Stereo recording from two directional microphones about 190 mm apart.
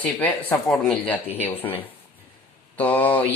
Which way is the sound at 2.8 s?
10° left (ahead or behind).